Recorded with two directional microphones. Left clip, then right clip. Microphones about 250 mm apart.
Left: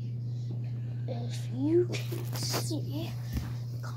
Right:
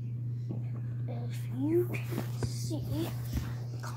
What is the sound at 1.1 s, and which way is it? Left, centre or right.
Whispering, right.